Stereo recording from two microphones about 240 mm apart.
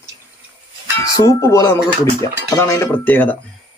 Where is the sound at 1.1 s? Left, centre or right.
Centre.